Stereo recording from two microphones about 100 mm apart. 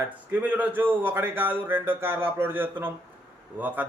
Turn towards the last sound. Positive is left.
turn(degrees=-15)  # may be behind; listen again after turning